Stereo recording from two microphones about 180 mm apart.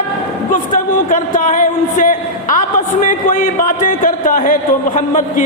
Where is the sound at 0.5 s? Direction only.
45° left (ahead or behind).